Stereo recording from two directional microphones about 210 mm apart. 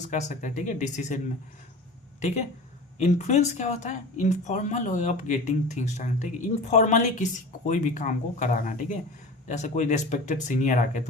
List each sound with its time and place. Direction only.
0.0 s speech: 35° left (ahead or behind)
2.2 s speech: 35° left (ahead or behind)